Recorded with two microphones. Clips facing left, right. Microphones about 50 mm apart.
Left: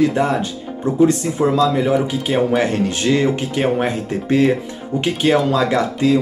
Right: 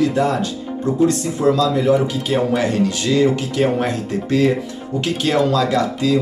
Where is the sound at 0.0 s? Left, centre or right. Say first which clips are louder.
Left 1 dB; left.